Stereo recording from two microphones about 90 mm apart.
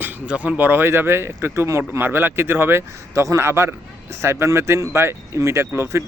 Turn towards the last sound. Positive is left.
turn(degrees=-30)  # may be behind; listen again after turning